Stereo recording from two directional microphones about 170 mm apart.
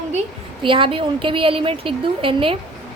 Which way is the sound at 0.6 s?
30° right (ahead or behind).